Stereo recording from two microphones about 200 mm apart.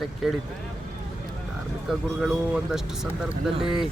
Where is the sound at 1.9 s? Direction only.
Centre (ahead or behind).